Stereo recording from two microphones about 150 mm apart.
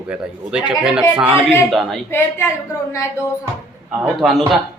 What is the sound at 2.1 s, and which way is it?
Speech, 15° left (ahead or behind).